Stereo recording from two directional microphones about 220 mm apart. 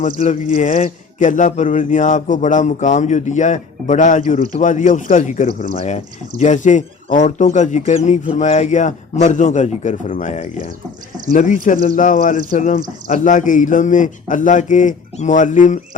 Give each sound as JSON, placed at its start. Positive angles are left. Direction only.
{"t": 0.0, "sound": "speech", "side_deg": 35}